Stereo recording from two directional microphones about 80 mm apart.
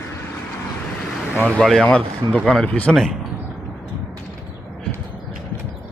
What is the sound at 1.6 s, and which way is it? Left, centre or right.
Speech, centre.